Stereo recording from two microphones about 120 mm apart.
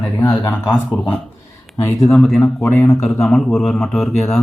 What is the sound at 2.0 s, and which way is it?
Speech, centre (ahead or behind).